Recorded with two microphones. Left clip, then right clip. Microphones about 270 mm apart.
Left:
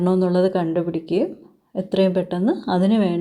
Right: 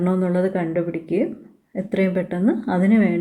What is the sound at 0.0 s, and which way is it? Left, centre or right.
Speech, centre.